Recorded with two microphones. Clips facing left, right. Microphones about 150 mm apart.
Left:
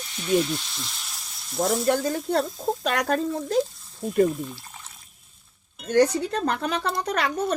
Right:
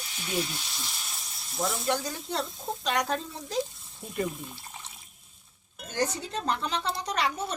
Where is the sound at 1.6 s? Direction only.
50° left (ahead or behind).